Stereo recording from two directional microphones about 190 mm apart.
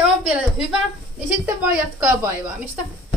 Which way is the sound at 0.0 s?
5° right (ahead or behind).